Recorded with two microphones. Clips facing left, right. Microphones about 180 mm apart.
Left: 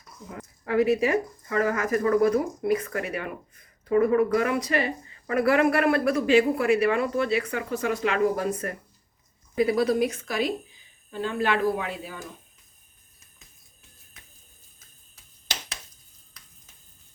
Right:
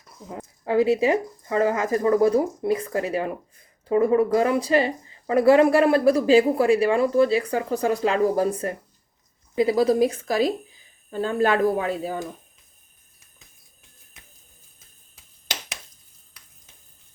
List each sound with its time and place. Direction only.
0.3 s speech: 25° right (ahead or behind)